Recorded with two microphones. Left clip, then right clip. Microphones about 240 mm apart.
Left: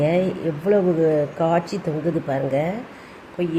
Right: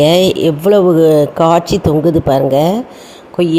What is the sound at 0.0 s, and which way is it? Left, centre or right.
Speech, right.